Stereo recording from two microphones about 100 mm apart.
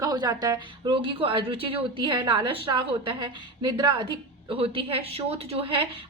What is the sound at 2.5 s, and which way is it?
Speech, 60° right (ahead or behind).